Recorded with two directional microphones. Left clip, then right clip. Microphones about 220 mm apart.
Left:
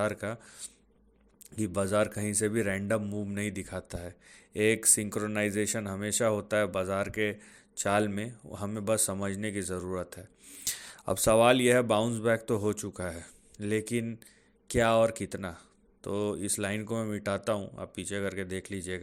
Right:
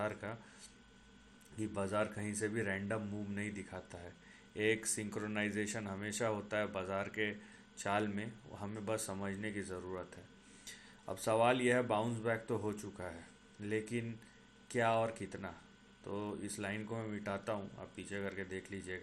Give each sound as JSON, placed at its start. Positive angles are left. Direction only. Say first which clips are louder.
{"t": 0.0, "sound": "speech", "louder": "left 9 dB", "side_deg": 45}
{"t": 1.5, "sound": "speech", "louder": "left 9 dB", "side_deg": 40}